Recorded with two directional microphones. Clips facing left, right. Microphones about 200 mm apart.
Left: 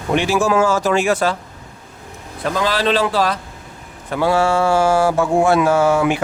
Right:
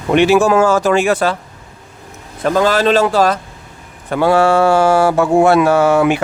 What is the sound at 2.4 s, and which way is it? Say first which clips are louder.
Speech: right 6 dB; 45° right (ahead or behind).